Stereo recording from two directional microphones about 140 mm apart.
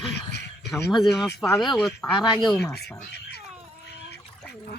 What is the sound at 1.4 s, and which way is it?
Speech, 25° left (ahead or behind).